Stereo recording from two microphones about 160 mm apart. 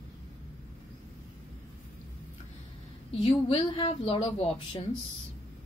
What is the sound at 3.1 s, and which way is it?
Speech, 35° left (ahead or behind).